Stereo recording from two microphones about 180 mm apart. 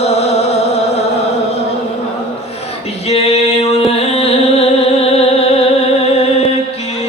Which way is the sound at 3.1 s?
35° left (ahead or behind).